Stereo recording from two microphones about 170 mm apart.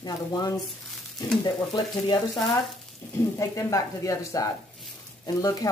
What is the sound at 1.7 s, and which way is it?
Speech, 25° left (ahead or behind).